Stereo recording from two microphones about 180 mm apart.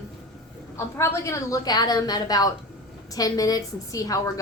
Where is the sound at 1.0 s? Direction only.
15° left (ahead or behind).